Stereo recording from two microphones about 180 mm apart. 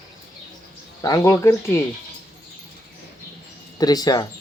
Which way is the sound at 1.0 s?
15° left (ahead or behind).